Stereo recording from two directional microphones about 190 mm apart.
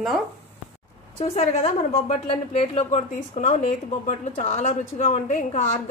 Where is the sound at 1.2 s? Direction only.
30° left (ahead or behind).